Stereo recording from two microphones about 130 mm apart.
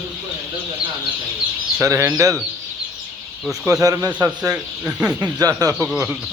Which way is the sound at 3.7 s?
25° right (ahead or behind).